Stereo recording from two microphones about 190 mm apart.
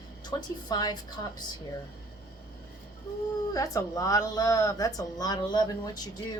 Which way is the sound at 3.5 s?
15° left (ahead or behind).